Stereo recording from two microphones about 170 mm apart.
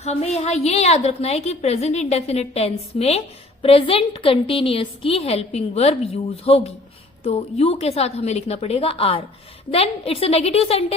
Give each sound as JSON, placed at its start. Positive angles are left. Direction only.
{"t": 0.0, "sound": "a woman's voice", "side_deg": 40}